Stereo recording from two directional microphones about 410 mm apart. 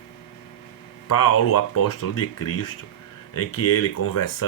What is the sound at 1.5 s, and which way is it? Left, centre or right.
Speech, left.